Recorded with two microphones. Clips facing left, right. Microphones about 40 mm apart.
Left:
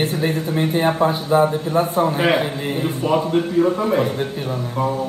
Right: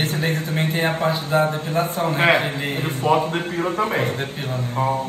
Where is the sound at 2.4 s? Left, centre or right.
Right.